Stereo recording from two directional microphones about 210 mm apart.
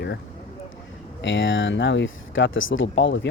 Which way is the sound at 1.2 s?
65° left (ahead or behind).